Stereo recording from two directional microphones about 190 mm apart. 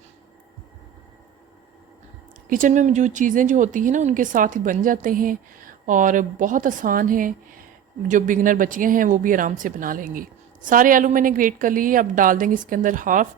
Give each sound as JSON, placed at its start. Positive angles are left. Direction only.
{"t": 2.5, "sound": "a woman's voice", "side_deg": -45}